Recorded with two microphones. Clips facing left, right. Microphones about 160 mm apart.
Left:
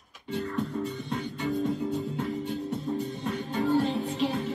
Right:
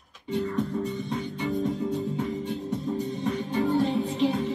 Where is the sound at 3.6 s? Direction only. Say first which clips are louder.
Right 1 dB; centre (ahead or behind).